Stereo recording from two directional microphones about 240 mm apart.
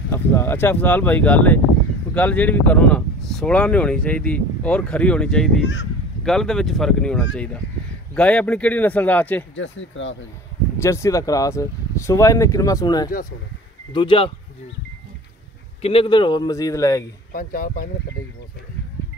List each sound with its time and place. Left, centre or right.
0.1 s speech: centre
9.6 s speech: left
10.8 s speech: centre
15.8 s speech: left
17.3 s speech: left